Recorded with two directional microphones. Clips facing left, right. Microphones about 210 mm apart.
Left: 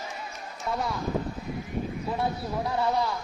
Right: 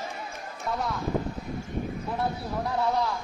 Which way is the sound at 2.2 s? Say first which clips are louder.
Even; centre (ahead or behind).